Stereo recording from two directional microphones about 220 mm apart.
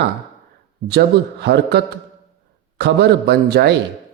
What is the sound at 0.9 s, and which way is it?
A man's voice, 50° right (ahead or behind).